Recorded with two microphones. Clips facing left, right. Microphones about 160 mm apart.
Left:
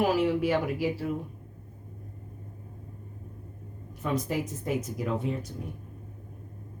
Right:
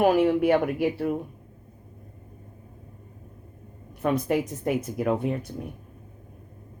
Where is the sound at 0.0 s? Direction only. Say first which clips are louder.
Right 5 dB; 55° right (ahead or behind).